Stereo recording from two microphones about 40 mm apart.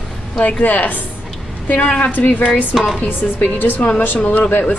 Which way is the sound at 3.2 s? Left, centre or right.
Left.